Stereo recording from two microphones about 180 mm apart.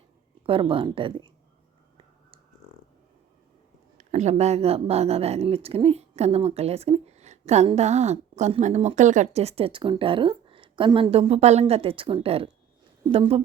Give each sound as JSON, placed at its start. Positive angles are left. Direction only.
{"t": 0.4, "sound": "speech", "side_deg": -30}
{"t": 3.9, "sound": "speech", "side_deg": -40}